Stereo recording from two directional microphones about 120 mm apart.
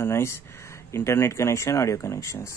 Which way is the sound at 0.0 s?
20° left (ahead or behind).